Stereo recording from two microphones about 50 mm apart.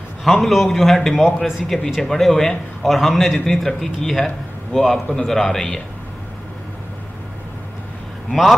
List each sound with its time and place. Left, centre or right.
0.2 s a man's voice: centre
1.2 s a man's voice: centre
2.0 s a man's voice: centre
8.3 s a man's voice: centre